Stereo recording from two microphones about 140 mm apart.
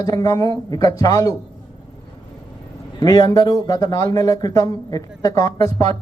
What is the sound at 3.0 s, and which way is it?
A man's voice, 25° left (ahead or behind).